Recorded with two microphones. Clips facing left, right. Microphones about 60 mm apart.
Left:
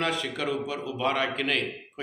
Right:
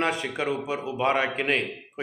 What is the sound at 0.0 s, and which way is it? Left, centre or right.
A man's voice, right.